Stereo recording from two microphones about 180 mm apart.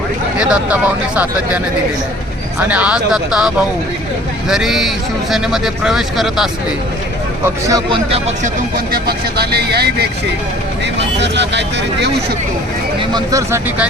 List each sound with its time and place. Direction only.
0.3 s speech: 5° right (ahead or behind)
7.4 s speech: 25° right (ahead or behind)
8.9 s speech: 60° right (ahead or behind)
11.2 s speech: 75° right (ahead or behind)
13.0 s speech: 20° right (ahead or behind)